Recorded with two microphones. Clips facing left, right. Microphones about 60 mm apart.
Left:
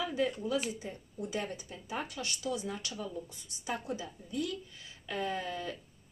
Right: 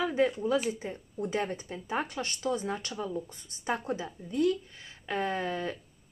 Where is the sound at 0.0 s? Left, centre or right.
Right.